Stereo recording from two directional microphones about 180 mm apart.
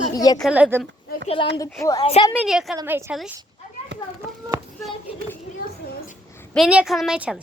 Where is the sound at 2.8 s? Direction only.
15° right (ahead or behind).